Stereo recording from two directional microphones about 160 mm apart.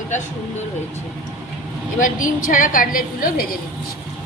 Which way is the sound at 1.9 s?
55° left (ahead or behind).